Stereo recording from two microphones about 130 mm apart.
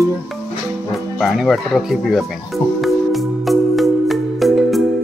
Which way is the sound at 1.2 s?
Centre (ahead or behind).